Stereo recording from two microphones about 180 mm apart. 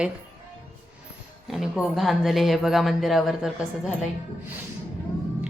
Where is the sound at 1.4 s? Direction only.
Centre (ahead or behind).